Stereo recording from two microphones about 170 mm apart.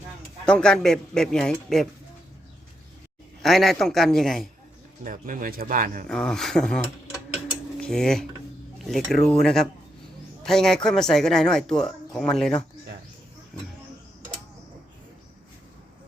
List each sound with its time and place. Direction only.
0.4 s speech: 5° left (ahead or behind)
3.4 s speech: centre (ahead or behind)
5.0 s speech: 55° right (ahead or behind)
6.1 s speech: 5° left (ahead or behind)
7.8 s cutlery: 5° left (ahead or behind)
8.8 s speech: centre (ahead or behind)